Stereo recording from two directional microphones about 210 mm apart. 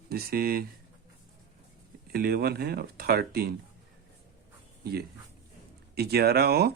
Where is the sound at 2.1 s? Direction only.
45° right (ahead or behind).